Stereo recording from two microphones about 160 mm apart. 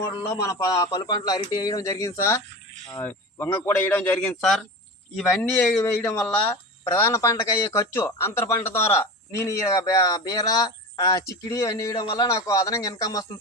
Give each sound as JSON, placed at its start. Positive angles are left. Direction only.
{"t": 0.1, "sound": "a man's voice", "side_deg": 20}